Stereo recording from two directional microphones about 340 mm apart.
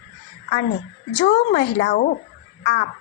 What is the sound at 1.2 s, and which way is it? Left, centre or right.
A woman's voice, left.